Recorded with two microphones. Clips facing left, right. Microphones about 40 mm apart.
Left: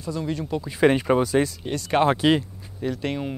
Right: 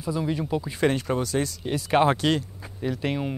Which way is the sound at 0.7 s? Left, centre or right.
Centre.